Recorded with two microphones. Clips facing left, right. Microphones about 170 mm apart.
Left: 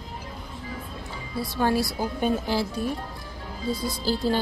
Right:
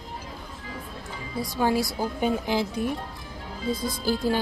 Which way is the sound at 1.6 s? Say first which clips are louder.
Even; 15° right (ahead or behind).